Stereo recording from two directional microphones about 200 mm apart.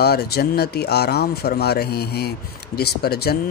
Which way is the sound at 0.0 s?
55° left (ahead or behind).